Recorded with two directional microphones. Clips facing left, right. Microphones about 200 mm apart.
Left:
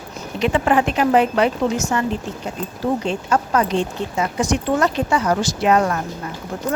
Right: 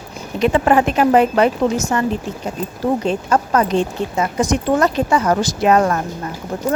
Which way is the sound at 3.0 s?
40° right (ahead or behind).